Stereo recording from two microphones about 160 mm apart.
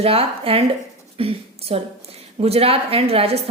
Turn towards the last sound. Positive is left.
turn(degrees=-40)  # may be behind; listen again after turning